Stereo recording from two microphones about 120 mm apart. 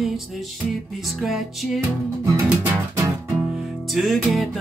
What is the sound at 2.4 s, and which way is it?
Music, 20° right (ahead or behind).